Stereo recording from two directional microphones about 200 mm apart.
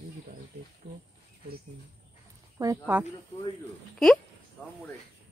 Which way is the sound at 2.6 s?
15° right (ahead or behind).